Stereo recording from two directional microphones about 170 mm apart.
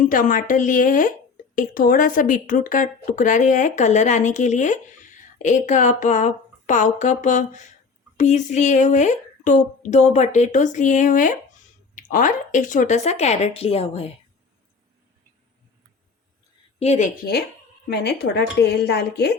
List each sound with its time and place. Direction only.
0.0 s speech: 50° left (ahead or behind); by 14.1 s 35° left (ahead or behind)
16.8 s speech: 40° left (ahead or behind)
17.2 s a woman's voice: 65° left (ahead or behind)